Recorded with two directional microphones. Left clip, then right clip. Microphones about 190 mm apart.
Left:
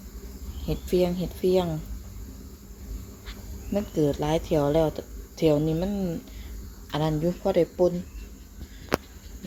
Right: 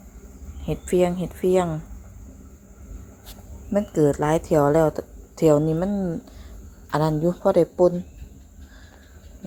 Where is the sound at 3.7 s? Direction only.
25° right (ahead or behind).